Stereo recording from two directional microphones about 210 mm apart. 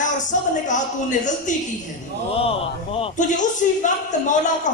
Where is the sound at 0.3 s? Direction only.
35° left (ahead or behind).